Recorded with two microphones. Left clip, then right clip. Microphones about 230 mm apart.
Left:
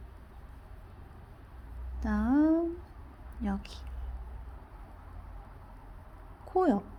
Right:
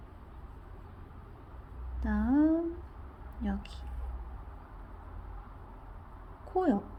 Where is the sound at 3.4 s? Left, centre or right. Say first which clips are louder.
Left 2 dB; centre.